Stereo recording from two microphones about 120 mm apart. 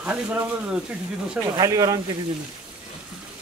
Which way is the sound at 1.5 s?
30° right (ahead or behind).